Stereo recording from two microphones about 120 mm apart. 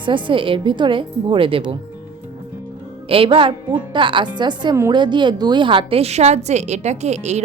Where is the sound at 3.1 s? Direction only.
50° right (ahead or behind).